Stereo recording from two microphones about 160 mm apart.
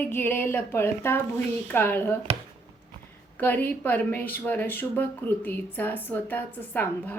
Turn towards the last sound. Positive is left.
turn(degrees=10)  # may be behind; listen again after turning